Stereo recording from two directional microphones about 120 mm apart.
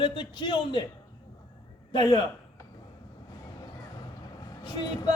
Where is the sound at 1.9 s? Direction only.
35° left (ahead or behind).